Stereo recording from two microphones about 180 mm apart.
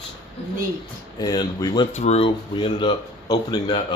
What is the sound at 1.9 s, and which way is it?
Speech, 40° left (ahead or behind).